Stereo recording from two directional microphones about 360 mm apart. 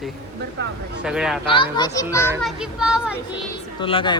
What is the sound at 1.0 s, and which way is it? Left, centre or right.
Speech, centre.